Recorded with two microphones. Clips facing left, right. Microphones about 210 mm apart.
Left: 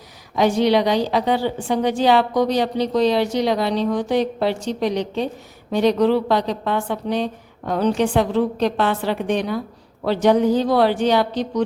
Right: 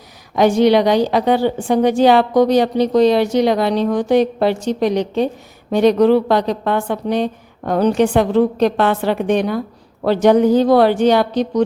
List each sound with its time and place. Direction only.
0.3 s a woman's voice: 55° right (ahead or behind)